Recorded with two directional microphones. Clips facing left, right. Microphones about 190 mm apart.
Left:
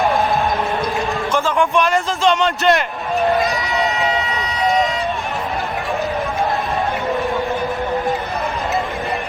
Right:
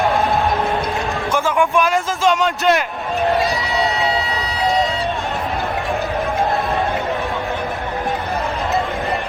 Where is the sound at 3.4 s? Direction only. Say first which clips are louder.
Even; 30° right (ahead or behind).